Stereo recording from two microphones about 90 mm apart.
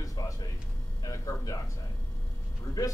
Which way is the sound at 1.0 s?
40° left (ahead or behind).